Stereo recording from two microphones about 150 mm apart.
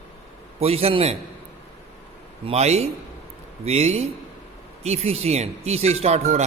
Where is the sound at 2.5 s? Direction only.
45° right (ahead or behind).